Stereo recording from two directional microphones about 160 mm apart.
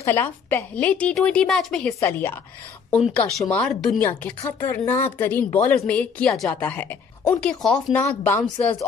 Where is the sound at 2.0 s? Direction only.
15° left (ahead or behind).